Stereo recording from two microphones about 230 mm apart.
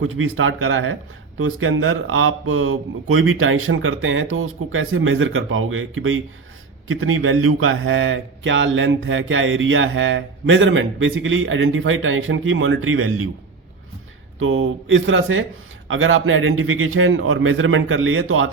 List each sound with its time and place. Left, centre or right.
0.0 s speech: right
14.3 s speech: right